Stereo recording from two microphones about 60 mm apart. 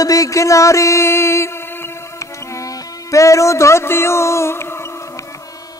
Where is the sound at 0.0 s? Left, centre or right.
Left.